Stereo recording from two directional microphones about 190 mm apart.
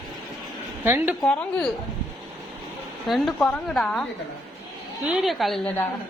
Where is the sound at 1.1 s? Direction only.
5° left (ahead or behind).